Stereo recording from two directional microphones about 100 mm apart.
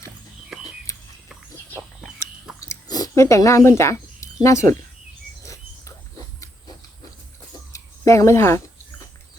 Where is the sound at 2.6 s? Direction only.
35° left (ahead or behind).